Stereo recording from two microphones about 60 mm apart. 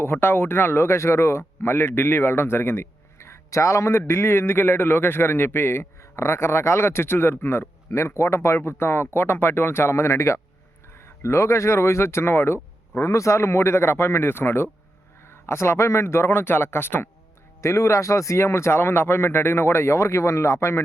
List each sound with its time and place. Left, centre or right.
0.0 s speech: left
7.9 s speech: left
13.0 s speech: left
17.6 s speech: left